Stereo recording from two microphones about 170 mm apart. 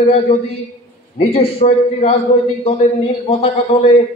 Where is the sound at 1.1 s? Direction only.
40° left (ahead or behind).